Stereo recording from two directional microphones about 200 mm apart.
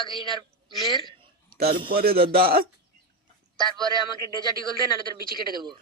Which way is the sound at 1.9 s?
50° right (ahead or behind).